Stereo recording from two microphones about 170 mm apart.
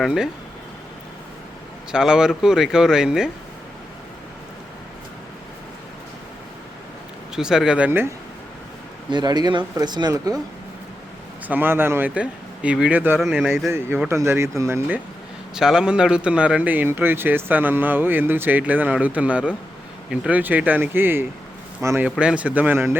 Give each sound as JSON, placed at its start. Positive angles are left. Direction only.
{"t": 0.0, "sound": "speech", "side_deg": -5}
{"t": 1.9, "sound": "speech", "side_deg": -5}
{"t": 7.3, "sound": "speech", "side_deg": -5}
{"t": 9.0, "sound": "speech", "side_deg": -25}
{"t": 11.4, "sound": "speech", "side_deg": -10}
{"t": 13.7, "sound": "speech", "side_deg": -15}